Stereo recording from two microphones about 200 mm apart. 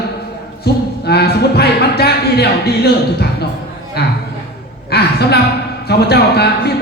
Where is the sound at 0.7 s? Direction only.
55° left (ahead or behind).